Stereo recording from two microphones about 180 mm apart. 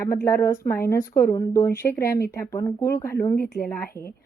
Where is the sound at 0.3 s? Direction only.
15° left (ahead or behind).